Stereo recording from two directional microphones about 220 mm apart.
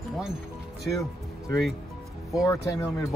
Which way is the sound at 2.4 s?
15° left (ahead or behind).